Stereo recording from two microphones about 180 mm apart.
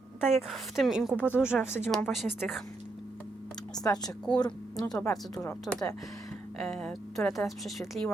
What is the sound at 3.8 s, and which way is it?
Speech, 20° left (ahead or behind).